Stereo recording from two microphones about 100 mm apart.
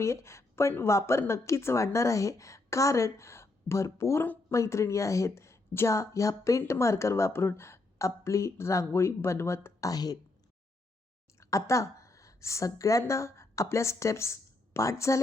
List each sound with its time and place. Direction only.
0.0 s a woman's voice: 30° left (ahead or behind)
9.9 s a woman's voice: 40° left (ahead or behind)
11.3 s a woman's voice: 30° left (ahead or behind)